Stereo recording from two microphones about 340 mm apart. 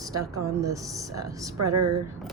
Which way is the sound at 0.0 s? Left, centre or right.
Centre.